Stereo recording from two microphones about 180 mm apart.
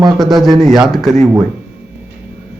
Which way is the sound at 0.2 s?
Centre (ahead or behind).